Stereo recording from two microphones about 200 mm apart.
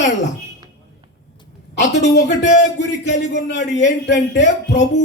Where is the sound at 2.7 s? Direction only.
60° left (ahead or behind).